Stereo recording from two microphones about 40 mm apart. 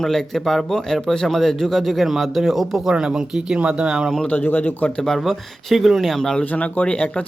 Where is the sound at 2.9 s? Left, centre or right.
Centre.